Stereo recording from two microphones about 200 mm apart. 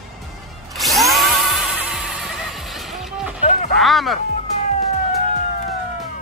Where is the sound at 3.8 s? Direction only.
Centre (ahead or behind).